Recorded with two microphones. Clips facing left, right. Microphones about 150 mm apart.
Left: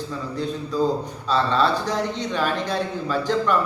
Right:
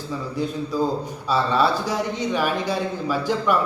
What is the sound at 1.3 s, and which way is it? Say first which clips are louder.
Speech: even; 10° right (ahead or behind).